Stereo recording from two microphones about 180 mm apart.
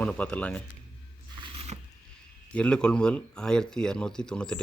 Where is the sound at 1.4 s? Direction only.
35° right (ahead or behind).